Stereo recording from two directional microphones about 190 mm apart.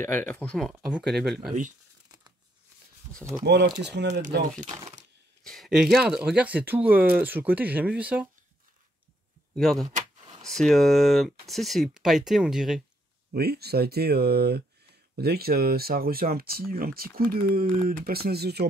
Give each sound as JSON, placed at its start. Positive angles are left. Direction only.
{"t": 0.0, "sound": "speech", "side_deg": 10}
{"t": 3.4, "sound": "speech", "side_deg": -60}
{"t": 5.4, "sound": "speech", "side_deg": 0}
{"t": 9.6, "sound": "speech", "side_deg": 0}
{"t": 10.2, "sound": "a sound", "side_deg": -25}
{"t": 10.5, "sound": "speech", "side_deg": 0}
{"t": 13.3, "sound": "speech", "side_deg": -55}